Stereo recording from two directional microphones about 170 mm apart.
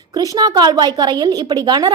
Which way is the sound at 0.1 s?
20° right (ahead or behind).